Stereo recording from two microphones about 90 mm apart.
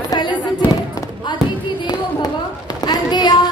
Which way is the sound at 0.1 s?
55° left (ahead or behind).